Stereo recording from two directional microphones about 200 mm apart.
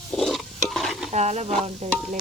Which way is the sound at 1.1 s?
35° right (ahead or behind).